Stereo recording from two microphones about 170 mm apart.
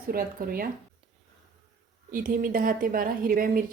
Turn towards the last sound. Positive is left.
turn(degrees=-55)  # may be behind; listen again after turning